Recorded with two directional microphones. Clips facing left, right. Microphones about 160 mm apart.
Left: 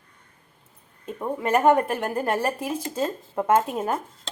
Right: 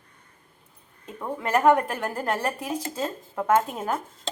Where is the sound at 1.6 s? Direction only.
20° left (ahead or behind).